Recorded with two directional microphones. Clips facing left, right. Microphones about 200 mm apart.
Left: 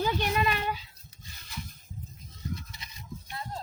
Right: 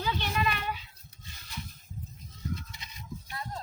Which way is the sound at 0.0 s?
45° left (ahead or behind).